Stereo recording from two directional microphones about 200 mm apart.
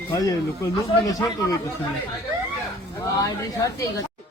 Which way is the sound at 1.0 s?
20° left (ahead or behind).